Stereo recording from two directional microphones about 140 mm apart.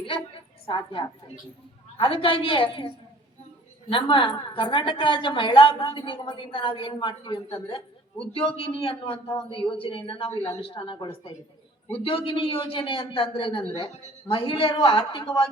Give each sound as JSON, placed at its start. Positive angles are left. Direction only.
{"t": 0.7, "sound": "a woman's voice", "side_deg": 35}